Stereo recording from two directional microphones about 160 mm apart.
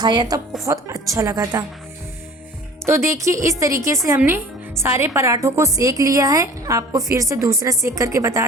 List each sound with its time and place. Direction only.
0.0 s a woman's voice: 25° right (ahead or behind)
2.8 s a woman's voice: 15° right (ahead or behind)